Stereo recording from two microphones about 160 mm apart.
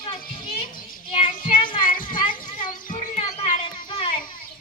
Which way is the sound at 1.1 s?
30° left (ahead or behind).